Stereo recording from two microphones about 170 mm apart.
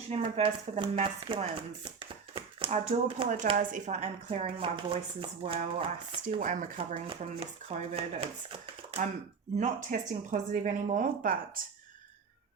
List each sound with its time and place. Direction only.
0.1 s speech: 35° right (ahead or behind)
6.4 s speech: 50° right (ahead or behind)
6.7 s speech: 35° right (ahead or behind)
9.6 s speech: 45° right (ahead or behind)